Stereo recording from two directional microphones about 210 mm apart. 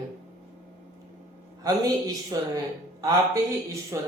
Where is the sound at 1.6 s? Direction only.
15° right (ahead or behind).